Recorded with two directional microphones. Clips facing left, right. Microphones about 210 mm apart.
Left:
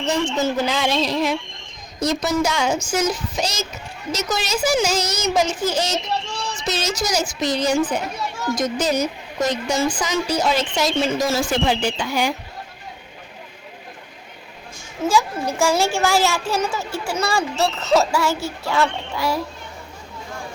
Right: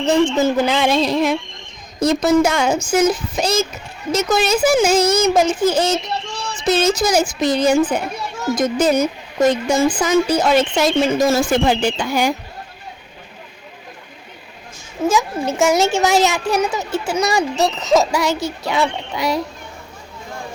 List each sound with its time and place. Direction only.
0.1 s a child's voice: 55° right (ahead or behind)
15.1 s a woman's voice: 20° right (ahead or behind)